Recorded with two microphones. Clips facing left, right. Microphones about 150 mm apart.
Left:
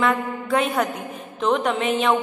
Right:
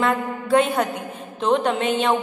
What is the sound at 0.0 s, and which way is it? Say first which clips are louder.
A man's voice: even; 30° right (ahead or behind).